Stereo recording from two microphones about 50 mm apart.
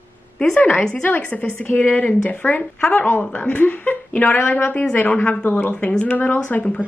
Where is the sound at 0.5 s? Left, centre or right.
Left.